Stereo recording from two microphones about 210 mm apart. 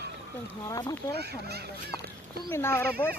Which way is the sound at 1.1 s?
50° right (ahead or behind).